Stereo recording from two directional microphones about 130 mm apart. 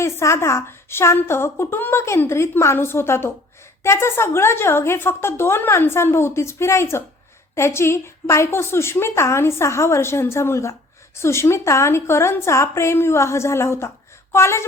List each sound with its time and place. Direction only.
0.0 s a woman's voice: 20° left (ahead or behind)